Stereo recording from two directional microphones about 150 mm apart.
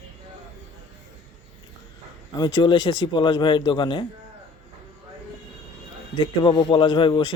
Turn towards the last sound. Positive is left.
turn(degrees=30)  # may be behind; listen again after turning